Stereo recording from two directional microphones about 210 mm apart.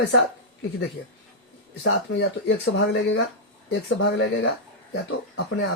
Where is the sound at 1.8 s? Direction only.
60° left (ahead or behind).